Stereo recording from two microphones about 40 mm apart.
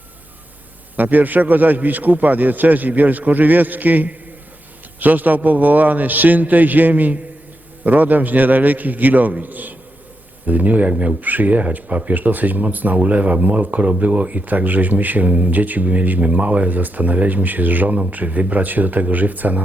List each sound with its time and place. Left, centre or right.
0.9 s speech: right